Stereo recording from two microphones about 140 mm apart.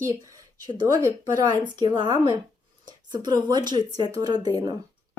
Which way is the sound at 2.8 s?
30° right (ahead or behind).